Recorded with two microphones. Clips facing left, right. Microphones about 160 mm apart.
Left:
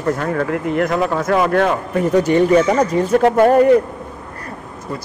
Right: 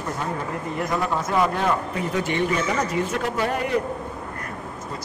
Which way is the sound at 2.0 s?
40° left (ahead or behind).